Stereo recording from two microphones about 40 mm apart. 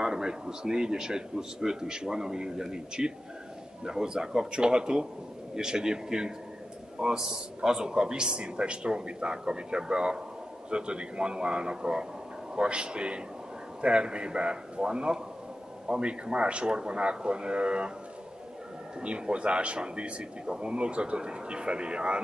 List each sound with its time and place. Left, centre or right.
0.0 s a man's voice: centre
18.9 s a man's voice: right